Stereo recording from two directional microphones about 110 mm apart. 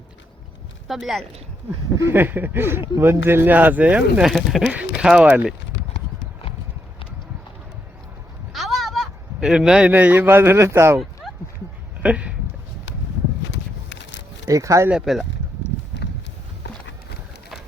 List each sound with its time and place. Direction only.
0.9 s speech: centre (ahead or behind)
2.0 s speech: 20° right (ahead or behind)
4.3 s speech: centre (ahead or behind)
4.6 s speech: 10° right (ahead or behind)
8.5 s a man's voice: centre (ahead or behind); by 11.0 s 25° right (ahead or behind)
12.0 s speech: 10° right (ahead or behind)
14.4 s speech: 30° right (ahead or behind)
14.8 s speech: 5° right (ahead or behind)